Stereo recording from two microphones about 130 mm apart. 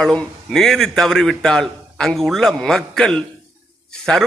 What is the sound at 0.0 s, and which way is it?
A man's voice, 5° left (ahead or behind).